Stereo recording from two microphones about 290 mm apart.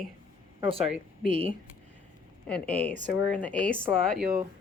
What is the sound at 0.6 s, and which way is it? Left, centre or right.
Speech, centre.